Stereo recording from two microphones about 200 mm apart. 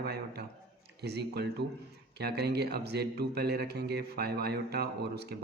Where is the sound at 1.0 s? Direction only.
55° right (ahead or behind).